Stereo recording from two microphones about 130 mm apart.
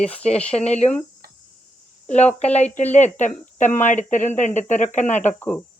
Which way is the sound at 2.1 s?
60° left (ahead or behind).